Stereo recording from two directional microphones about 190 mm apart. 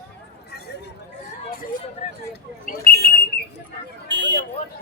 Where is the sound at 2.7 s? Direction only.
45° left (ahead or behind).